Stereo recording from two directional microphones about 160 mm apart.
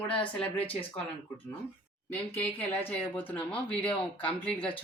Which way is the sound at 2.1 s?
10° left (ahead or behind).